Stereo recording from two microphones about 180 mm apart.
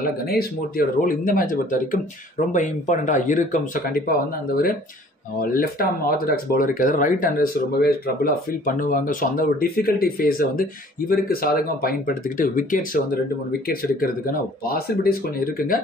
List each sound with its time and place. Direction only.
0.3 s speech: 55° left (ahead or behind)